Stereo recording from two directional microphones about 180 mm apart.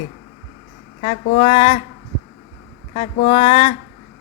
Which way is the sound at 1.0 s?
30° left (ahead or behind).